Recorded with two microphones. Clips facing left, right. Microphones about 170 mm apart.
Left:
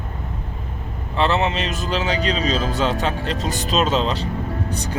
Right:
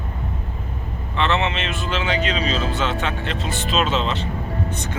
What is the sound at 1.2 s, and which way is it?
Speech, 35° left (ahead or behind).